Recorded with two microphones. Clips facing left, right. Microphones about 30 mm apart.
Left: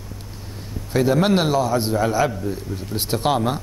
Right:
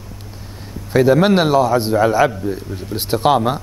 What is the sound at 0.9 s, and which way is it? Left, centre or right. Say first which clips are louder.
A man's voice: right 5 dB; centre.